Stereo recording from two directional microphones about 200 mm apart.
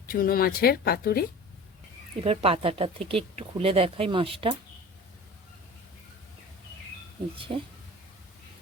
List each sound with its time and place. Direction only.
0.1 s speech: 45° left (ahead or behind)
2.2 s speech: 30° right (ahead or behind)
7.3 s speech: 25° right (ahead or behind)